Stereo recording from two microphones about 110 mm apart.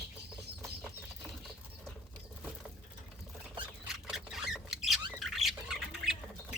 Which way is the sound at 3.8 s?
5° right (ahead or behind).